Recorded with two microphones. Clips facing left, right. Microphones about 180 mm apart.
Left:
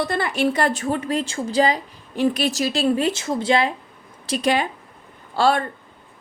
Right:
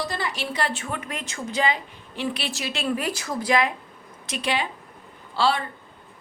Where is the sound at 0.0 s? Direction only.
55° left (ahead or behind); by 3.7 s 30° left (ahead or behind).